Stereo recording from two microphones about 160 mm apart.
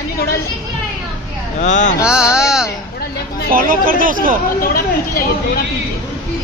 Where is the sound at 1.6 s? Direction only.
50° left (ahead or behind).